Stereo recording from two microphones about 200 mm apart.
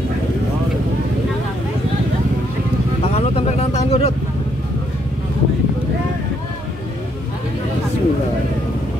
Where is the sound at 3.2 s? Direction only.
30° left (ahead or behind).